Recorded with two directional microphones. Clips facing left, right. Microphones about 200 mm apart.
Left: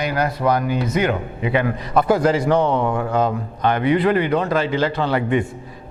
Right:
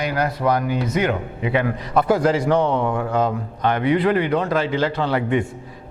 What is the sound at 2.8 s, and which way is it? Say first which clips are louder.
Speech: left 1 dB; 25° left (ahead or behind).